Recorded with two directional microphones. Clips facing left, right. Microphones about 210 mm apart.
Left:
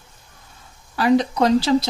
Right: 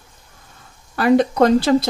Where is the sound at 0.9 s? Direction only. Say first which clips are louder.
Right 2 dB; 55° right (ahead or behind).